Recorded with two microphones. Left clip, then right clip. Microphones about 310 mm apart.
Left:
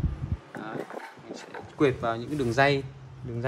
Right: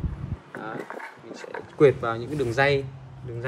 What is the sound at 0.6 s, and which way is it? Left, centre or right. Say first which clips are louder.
Dog: right 2 dB; centre.